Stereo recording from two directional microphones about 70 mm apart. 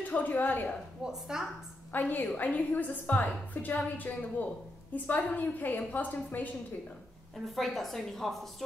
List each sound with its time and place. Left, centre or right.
0.1 s a woman's voice: left
1.0 s a woman's voice: centre
1.9 s a woman's voice: left
7.4 s a woman's voice: centre